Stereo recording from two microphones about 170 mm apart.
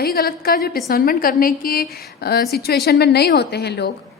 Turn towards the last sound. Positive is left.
turn(degrees=75)  # may be behind; listen again after turning